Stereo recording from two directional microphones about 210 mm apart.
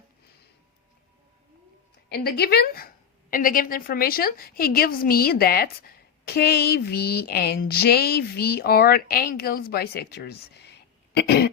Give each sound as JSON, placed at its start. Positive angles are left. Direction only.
{"t": 2.0, "sound": "a woman's voice", "side_deg": 50}